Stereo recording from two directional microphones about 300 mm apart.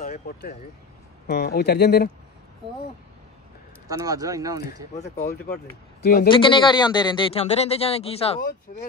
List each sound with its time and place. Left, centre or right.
0.0 s vehicle: left
1.2 s speech: left
3.9 s speech: centre
4.9 s speech: left
6.3 s speech: centre